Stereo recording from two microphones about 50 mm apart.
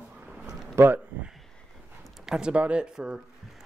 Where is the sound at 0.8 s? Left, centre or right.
Right.